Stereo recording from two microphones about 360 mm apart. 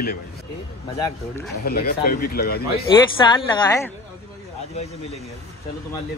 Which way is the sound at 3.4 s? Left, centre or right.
Centre.